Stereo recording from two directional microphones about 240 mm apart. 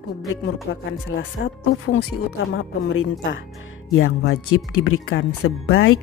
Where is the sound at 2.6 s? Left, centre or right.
Left.